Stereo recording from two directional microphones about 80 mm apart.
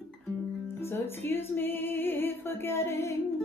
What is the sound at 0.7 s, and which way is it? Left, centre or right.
Music, left.